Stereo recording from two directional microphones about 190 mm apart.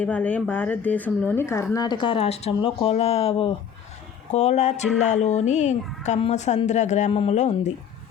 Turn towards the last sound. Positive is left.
turn(degrees=35)  # may be behind; listen again after turning